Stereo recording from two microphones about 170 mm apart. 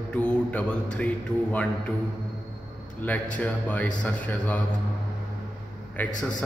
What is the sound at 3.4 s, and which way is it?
Speech, 10° left (ahead or behind).